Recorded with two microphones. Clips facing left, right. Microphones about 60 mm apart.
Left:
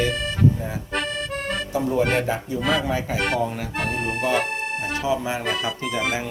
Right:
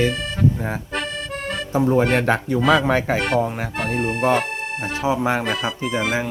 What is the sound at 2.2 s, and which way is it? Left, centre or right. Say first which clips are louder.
Speech: right 5 dB; right.